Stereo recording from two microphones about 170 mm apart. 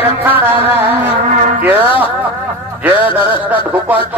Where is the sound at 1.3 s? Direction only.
50° right (ahead or behind).